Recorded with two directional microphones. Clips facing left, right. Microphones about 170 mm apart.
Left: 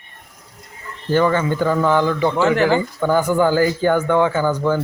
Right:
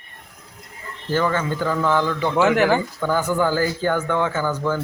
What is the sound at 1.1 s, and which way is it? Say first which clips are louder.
A man's voice: left 5 dB; 20° left (ahead or behind).